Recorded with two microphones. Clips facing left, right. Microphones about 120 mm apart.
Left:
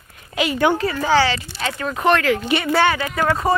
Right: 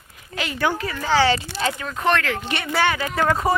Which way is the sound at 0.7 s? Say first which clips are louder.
Left 6 dB; 35° left (ahead or behind).